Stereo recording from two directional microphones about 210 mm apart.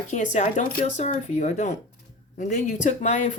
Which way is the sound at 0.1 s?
35° left (ahead or behind).